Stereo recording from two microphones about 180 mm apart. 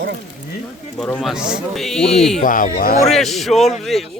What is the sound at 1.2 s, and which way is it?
Speech, 5° right (ahead or behind).